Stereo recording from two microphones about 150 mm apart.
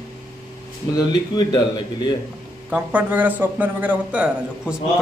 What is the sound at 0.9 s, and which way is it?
Speech, 30° left (ahead or behind).